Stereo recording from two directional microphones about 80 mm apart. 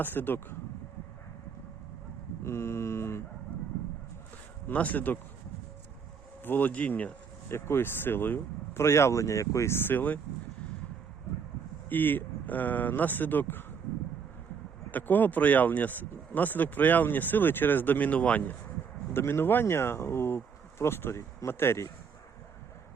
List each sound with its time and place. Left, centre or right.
0.0 s speech: left
2.4 s speech: left
4.7 s speech: centre
6.4 s speech: left
7.5 s speech: left
11.9 s speech: left
14.8 s speech: left